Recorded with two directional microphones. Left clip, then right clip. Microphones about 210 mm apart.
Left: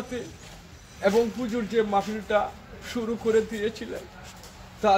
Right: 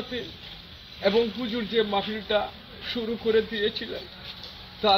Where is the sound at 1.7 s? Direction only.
5° left (ahead or behind).